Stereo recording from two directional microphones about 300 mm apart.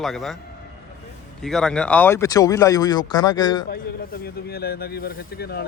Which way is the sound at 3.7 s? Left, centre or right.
Left.